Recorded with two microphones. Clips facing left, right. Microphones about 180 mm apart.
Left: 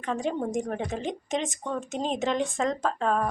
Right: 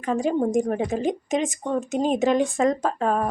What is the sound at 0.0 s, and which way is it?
A woman's voice, 10° right (ahead or behind).